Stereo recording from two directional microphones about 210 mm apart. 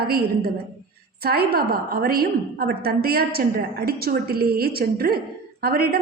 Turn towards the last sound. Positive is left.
turn(degrees=-45)  # may be behind; listen again after turning